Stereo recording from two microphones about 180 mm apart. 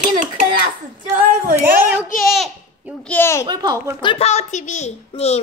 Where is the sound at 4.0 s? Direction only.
30° left (ahead or behind).